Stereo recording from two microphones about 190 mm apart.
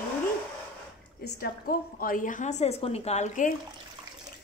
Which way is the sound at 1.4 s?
50° left (ahead or behind).